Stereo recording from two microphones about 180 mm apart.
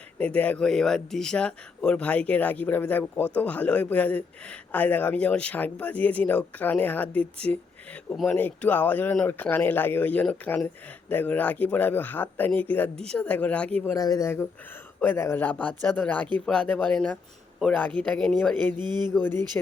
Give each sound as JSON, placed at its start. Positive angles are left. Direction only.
{"t": 0.2, "sound": "speech", "side_deg": 10}
{"t": 13.9, "sound": "speech", "side_deg": 20}
{"t": 18.8, "sound": "a sound", "side_deg": -25}
{"t": 19.1, "sound": "speech", "side_deg": 10}